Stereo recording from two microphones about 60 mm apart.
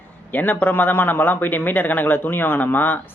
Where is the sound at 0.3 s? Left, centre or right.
Left.